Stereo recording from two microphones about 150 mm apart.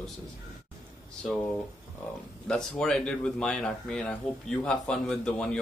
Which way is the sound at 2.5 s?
5° left (ahead or behind).